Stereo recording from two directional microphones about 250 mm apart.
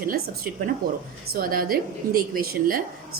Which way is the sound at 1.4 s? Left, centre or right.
Right.